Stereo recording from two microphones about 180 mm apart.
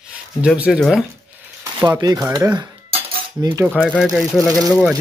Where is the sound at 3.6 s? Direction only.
5° left (ahead or behind).